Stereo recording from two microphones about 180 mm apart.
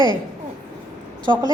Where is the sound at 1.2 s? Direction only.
25° right (ahead or behind).